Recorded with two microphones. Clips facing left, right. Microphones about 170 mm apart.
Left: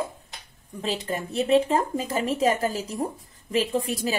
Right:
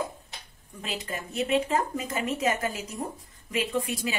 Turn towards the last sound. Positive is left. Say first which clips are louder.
# left 3 dB
turn(degrees=35)  # may be behind; listen again after turning